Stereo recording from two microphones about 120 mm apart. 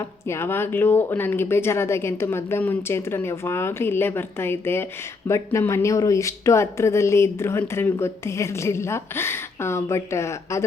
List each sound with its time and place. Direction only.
0.3 s speech: 20° left (ahead or behind)